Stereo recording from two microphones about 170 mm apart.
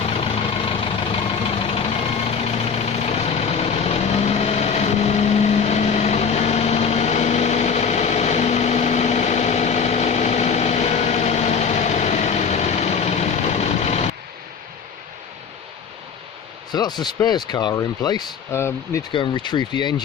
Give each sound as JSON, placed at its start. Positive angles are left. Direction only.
{"t": 0.0, "sound": "vehicle", "side_deg": 35}
{"t": 16.7, "sound": "speech", "side_deg": 25}
{"t": 19.1, "sound": "speech", "side_deg": 30}